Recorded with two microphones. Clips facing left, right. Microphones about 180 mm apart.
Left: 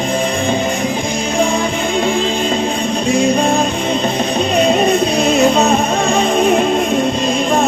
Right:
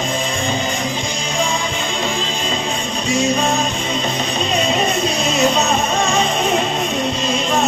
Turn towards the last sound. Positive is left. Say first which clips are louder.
# left 4 dB
turn(degrees=55)  # may be behind; listen again after turning